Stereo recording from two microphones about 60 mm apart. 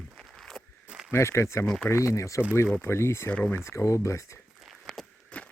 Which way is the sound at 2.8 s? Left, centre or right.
Left.